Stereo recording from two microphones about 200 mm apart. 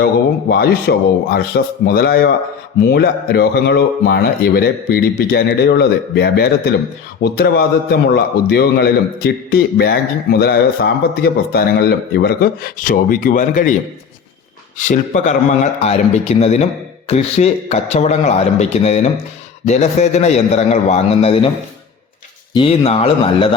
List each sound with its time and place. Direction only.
0.0 s a man's voice: 50° left (ahead or behind)
14.8 s a man's voice: 40° left (ahead or behind)
22.5 s speech: 25° left (ahead or behind)